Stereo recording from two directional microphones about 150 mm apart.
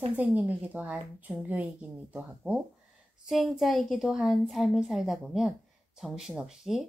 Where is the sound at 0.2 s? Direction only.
10° right (ahead or behind).